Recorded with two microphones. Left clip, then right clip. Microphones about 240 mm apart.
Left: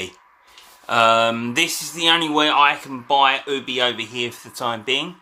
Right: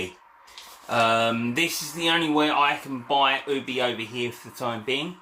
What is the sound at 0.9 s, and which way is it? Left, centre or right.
Speech, left.